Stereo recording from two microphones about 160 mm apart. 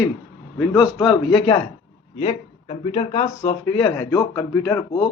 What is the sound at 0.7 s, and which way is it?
Speech, 20° left (ahead or behind).